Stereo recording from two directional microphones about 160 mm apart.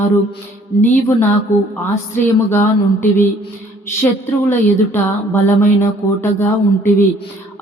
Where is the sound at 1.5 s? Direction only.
15° left (ahead or behind).